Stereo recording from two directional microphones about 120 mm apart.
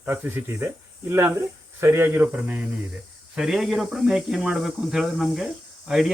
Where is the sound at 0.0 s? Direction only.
15° right (ahead or behind).